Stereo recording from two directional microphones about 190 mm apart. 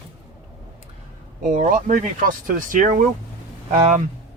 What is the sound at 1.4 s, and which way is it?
Speech, 40° right (ahead or behind).